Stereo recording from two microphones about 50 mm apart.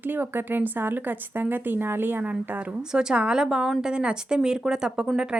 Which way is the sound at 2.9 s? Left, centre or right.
Centre.